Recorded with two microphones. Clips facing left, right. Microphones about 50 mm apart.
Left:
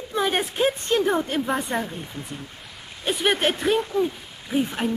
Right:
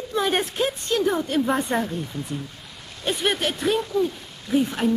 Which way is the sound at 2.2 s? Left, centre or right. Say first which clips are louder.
Right 3 dB; left.